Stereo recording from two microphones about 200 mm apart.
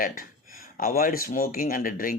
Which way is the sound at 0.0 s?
45° left (ahead or behind).